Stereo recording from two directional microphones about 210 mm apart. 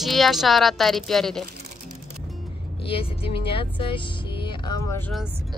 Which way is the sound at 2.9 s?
25° left (ahead or behind).